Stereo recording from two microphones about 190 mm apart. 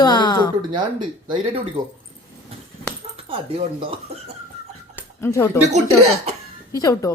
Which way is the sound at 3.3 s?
30° right (ahead or behind).